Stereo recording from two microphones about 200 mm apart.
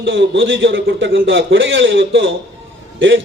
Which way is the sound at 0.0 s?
70° right (ahead or behind).